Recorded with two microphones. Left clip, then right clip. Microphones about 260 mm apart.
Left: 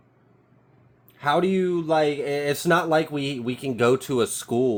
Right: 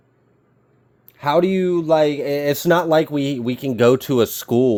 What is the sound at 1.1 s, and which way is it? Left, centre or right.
Speech, right.